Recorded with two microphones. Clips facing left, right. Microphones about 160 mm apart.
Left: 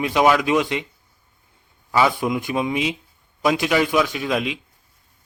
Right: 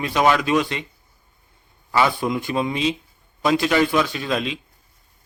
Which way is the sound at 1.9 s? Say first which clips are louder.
Left 1 dB; 10° left (ahead or behind).